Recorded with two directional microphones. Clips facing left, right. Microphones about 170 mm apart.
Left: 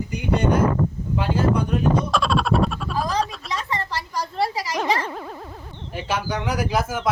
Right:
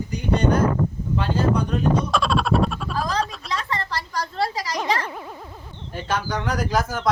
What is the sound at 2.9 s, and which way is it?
A woman's voice, 10° left (ahead or behind).